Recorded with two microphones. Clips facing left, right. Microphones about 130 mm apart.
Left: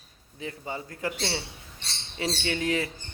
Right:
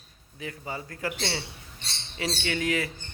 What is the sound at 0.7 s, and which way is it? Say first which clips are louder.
Speech: even; 25° left (ahead or behind).